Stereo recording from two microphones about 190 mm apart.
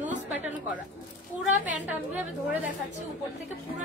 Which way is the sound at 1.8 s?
10° right (ahead or behind).